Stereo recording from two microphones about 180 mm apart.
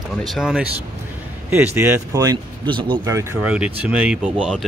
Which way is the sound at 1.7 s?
15° right (ahead or behind).